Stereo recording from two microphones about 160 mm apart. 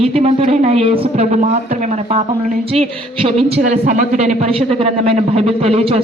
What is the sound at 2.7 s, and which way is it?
Speech, 35° right (ahead or behind).